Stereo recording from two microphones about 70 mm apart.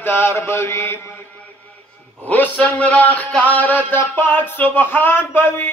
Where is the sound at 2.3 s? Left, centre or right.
Left.